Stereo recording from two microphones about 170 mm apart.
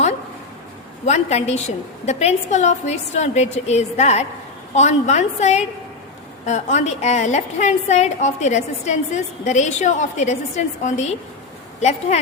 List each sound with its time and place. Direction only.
1.0 s a woman's voice: 40° left (ahead or behind)